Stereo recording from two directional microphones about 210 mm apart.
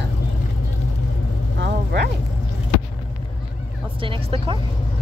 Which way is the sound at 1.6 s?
55° right (ahead or behind).